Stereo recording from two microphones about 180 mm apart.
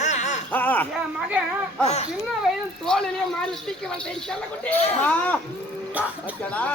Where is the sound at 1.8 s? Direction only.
35° left (ahead or behind).